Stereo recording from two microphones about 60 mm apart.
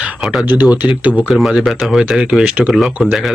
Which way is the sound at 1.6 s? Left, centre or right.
Centre.